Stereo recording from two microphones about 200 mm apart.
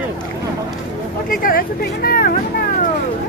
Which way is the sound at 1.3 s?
45° left (ahead or behind).